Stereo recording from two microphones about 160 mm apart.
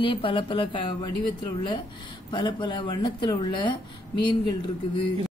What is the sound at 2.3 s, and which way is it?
Speech, 25° left (ahead or behind).